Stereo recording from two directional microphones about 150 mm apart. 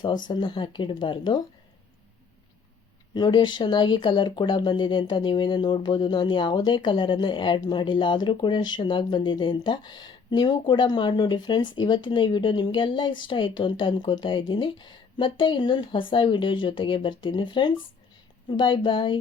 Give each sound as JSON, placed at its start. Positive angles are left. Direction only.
{"t": 0.0, "sound": "speech", "side_deg": 30}
{"t": 3.2, "sound": "speech", "side_deg": 30}